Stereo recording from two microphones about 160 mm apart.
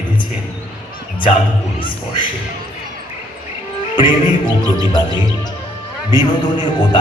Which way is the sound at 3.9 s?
30° left (ahead or behind).